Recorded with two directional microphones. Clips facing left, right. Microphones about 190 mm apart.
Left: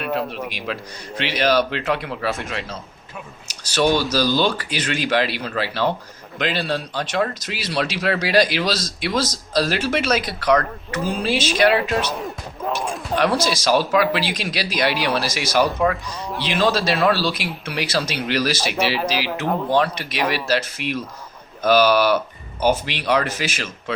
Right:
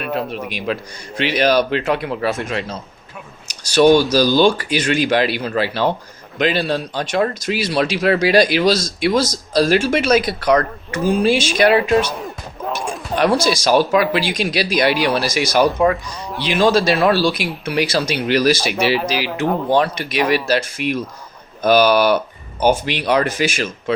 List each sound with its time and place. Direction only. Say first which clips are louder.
0.0 s speech: right 1 dB; 15° right (ahead or behind)
3.5 s speech: right 7 dB; 15° right (ahead or behind)
12.1 s speech: even; centre (ahead or behind)
13.1 s speech: right 4 dB; 15° right (ahead or behind)